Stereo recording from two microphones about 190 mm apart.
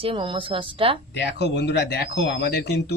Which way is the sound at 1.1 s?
65° left (ahead or behind).